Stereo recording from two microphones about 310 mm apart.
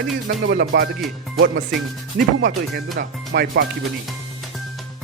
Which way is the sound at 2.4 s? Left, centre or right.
Right.